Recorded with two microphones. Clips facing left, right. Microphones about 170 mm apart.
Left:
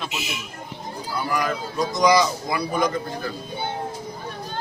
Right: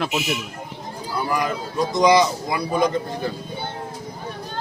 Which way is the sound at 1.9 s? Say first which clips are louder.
Right 2 dB; 25° right (ahead or behind).